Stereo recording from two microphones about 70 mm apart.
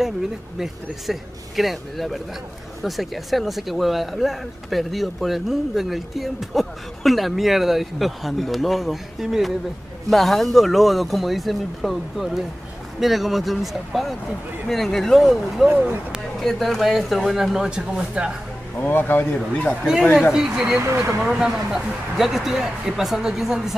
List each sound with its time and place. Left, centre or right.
1.1 s speech: centre
18.8 s speech: left
20.3 s speech: centre
20.8 s speech: right
21.2 s speech: centre